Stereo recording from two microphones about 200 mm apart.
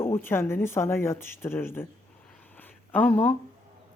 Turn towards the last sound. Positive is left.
turn(degrees=10)  # may be behind; listen again after turning